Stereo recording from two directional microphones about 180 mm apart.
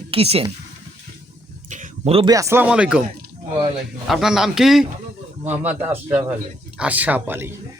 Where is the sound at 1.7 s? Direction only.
45° right (ahead or behind).